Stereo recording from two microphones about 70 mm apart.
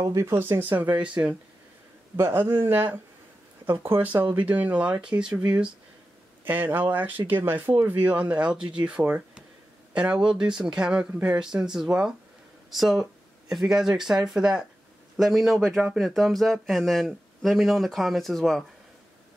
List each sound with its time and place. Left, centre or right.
0.0 s speech: right
0.4 s speech: right
2.3 s speech: right
6.4 s speech: right; by 18.7 s centre